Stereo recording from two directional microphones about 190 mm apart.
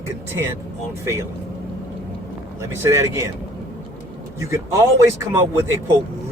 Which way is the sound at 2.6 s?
15° right (ahead or behind).